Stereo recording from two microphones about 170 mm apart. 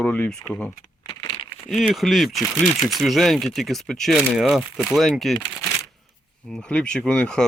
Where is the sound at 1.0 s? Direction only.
30° left (ahead or behind).